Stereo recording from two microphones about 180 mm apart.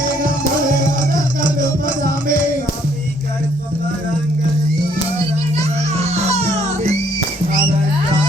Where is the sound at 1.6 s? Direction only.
50° right (ahead or behind).